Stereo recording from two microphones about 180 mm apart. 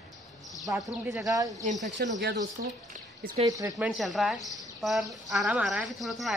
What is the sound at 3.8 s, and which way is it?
A woman's voice, centre (ahead or behind).